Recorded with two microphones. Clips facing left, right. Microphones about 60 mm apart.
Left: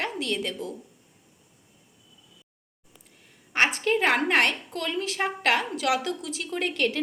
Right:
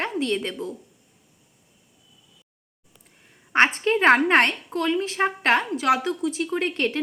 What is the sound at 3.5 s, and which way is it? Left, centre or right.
A woman's voice, right.